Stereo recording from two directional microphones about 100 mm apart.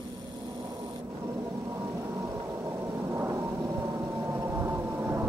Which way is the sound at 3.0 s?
25° right (ahead or behind).